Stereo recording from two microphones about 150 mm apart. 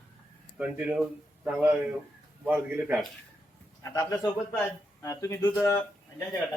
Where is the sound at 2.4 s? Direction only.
10° right (ahead or behind).